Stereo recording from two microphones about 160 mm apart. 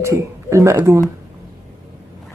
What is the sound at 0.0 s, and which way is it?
A man's voice, 20° right (ahead or behind).